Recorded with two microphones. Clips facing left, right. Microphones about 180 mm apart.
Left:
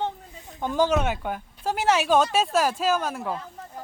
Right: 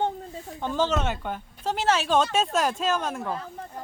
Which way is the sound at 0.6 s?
10° left (ahead or behind).